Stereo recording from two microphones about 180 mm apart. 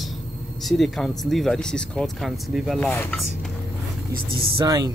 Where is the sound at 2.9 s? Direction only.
10° left (ahead or behind).